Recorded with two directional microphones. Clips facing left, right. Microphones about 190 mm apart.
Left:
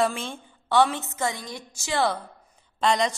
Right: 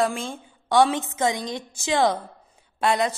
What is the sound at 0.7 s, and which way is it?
A woman's voice, 15° right (ahead or behind).